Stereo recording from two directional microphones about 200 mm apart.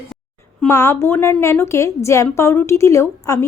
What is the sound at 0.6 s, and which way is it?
A woman's voice, 15° left (ahead or behind).